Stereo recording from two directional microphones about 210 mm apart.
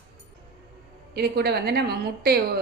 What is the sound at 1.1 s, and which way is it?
A woman's voice, 50° right (ahead or behind).